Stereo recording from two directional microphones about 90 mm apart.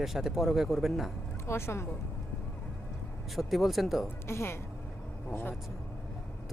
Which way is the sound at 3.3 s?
Centre (ahead or behind).